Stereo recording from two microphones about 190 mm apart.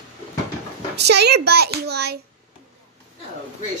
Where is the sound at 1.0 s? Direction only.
60° right (ahead or behind).